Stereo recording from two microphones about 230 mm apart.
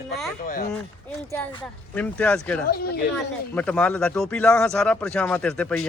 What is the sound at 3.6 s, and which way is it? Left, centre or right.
Speech, centre.